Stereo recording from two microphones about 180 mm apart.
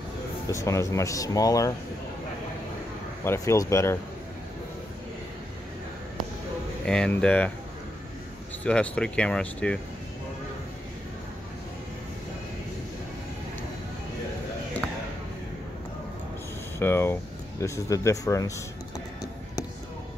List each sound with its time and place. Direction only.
0.7 s speech: 15° left (ahead or behind)
3.3 s speech: 15° left (ahead or behind)
6.9 s speech: 5° left (ahead or behind)
8.6 s speech: 5° left (ahead or behind)
14.8 s basketball bounce: 10° left (ahead or behind)
16.8 s speech: 15° left (ahead or behind)